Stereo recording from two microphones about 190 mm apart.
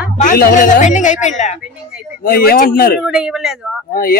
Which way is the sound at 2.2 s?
55° left (ahead or behind).